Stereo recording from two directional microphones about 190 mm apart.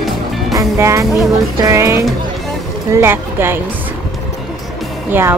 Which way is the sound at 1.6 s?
15° right (ahead or behind).